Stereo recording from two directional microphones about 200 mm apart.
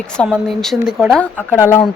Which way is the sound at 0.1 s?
5° left (ahead or behind).